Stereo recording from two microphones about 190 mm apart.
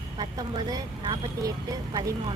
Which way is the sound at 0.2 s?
25° right (ahead or behind).